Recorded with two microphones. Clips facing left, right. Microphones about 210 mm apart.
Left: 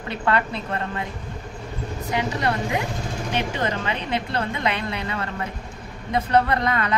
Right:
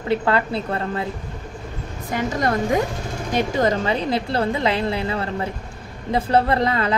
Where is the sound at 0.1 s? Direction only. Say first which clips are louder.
Right 4 dB; 30° right (ahead or behind).